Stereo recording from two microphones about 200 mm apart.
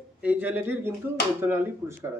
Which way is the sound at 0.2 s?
10° right (ahead or behind).